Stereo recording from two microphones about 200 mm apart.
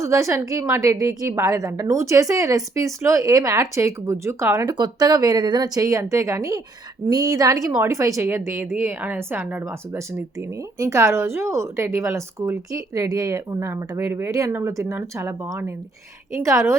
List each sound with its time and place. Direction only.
0.0 s a woman's voice: 15° right (ahead or behind)